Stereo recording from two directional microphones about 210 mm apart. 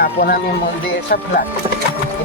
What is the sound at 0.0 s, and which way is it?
Speech, 45° left (ahead or behind).